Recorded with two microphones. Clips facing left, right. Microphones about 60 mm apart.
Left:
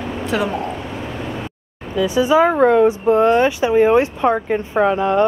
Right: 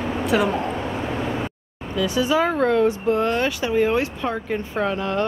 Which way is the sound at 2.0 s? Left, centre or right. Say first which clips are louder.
Left 6 dB; left.